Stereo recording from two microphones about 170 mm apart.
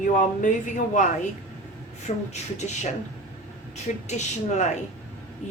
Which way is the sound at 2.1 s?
35° left (ahead or behind).